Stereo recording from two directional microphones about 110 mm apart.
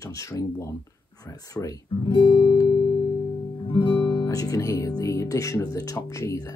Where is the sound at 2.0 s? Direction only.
50° left (ahead or behind).